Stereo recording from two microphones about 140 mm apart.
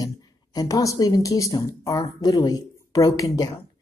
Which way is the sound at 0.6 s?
25° left (ahead or behind).